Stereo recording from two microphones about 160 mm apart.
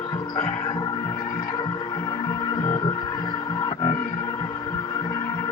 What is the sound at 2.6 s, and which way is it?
Music, 25° left (ahead or behind).